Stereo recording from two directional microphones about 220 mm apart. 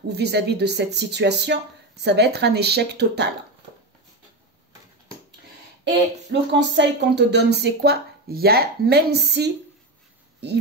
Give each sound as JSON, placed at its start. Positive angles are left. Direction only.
{"t": 0.1, "sound": "speech", "side_deg": -50}
{"t": 6.5, "sound": "speech", "side_deg": -50}